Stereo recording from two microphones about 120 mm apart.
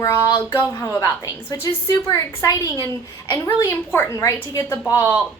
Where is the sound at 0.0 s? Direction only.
25° left (ahead or behind).